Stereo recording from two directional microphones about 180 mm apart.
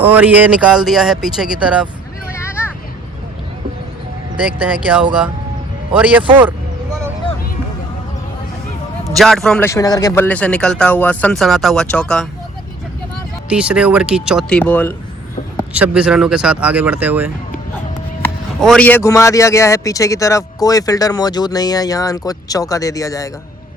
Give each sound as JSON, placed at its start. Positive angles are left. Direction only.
{"t": 0.0, "sound": "speech", "side_deg": -10}
{"t": 2.3, "sound": "a sound", "side_deg": 15}
{"t": 5.9, "sound": "speech", "side_deg": -10}
{"t": 9.1, "sound": "speech", "side_deg": 0}
{"t": 9.6, "sound": "speech", "side_deg": 20}
{"t": 13.5, "sound": "speech", "side_deg": -5}
{"t": 14.6, "sound": "speech", "side_deg": 10}
{"t": 15.7, "sound": "speech", "side_deg": -5}
{"t": 18.2, "sound": "a man's voice", "side_deg": 5}